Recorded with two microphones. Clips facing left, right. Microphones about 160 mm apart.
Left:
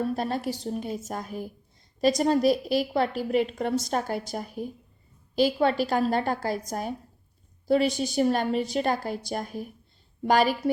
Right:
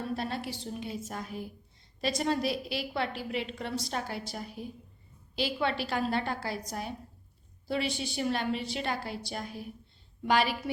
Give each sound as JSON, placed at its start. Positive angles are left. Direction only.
{"t": 0.0, "sound": "a woman's voice", "side_deg": 45}